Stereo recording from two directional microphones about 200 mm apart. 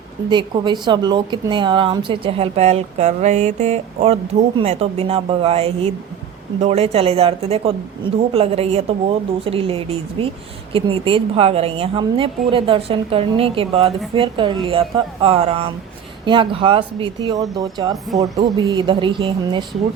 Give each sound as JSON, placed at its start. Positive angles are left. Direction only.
{"t": 0.3, "sound": "a woman's voice", "side_deg": -20}